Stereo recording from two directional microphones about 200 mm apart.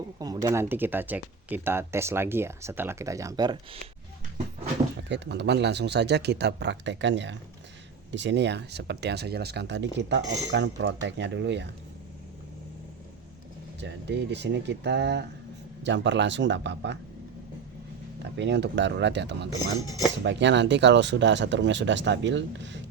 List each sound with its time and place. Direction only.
0.2 s speech: 20° right (ahead or behind)
4.9 s speech: 60° right (ahead or behind)
13.8 s speech: 60° right (ahead or behind)
18.2 s speech: 60° right (ahead or behind)